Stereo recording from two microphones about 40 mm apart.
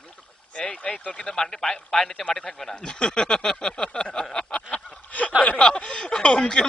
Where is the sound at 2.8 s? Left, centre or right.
Left.